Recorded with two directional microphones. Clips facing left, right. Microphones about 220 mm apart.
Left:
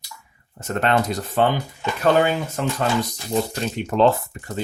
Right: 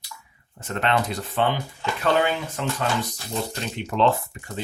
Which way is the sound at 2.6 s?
45° left (ahead or behind).